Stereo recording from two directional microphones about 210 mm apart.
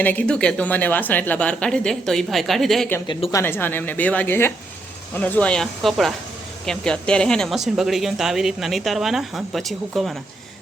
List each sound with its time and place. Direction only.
0.0 s a woman's voice: 10° left (ahead or behind)